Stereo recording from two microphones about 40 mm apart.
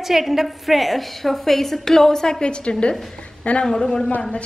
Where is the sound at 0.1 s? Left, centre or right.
Centre.